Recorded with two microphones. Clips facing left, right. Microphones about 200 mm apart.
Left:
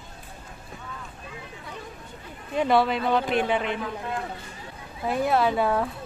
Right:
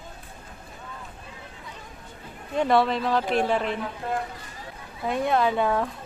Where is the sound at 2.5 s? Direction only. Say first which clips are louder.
Even; centre (ahead or behind).